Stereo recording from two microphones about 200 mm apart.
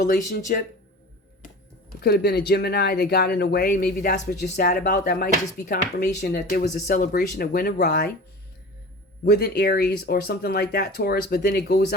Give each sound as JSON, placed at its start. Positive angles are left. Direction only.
{"t": 0.3, "sound": "speech", "side_deg": 45}
{"t": 2.0, "sound": "speech", "side_deg": 50}
{"t": 9.2, "sound": "speech", "side_deg": 50}